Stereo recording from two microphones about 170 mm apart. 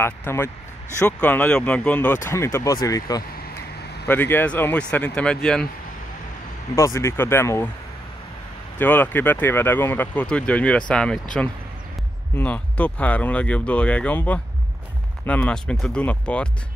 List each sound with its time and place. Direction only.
0.0 s speech: 15° left (ahead or behind)
4.1 s speech: 10° left (ahead or behind)
6.7 s speech: 15° left (ahead or behind)
8.7 s speech: 10° left (ahead or behind)